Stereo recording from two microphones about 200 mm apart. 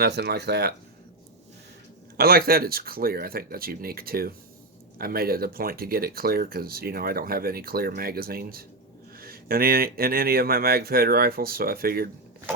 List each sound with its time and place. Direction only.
0.0 s speech: 55° right (ahead or behind)
2.1 s speech: 50° right (ahead or behind)